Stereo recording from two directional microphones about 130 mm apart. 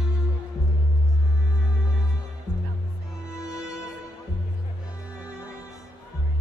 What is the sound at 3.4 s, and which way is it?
Music, 5° right (ahead or behind).